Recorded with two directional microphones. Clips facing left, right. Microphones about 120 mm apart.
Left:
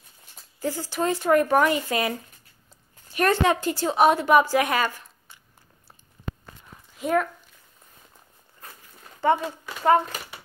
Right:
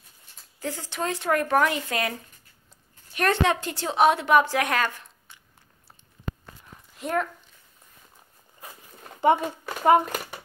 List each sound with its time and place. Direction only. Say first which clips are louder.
0.6 s a woman's voice: left 4 dB; 5° left (ahead or behind)
3.2 s a woman's voice: left 2 dB; centre (ahead or behind)
7.0 s speech: left 4 dB; centre (ahead or behind)
8.6 s a sound: right 2 dB; 10° right (ahead or behind)
9.2 s speech: right 1 dB; 15° right (ahead or behind)